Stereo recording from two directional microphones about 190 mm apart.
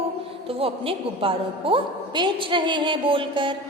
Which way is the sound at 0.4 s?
30° right (ahead or behind).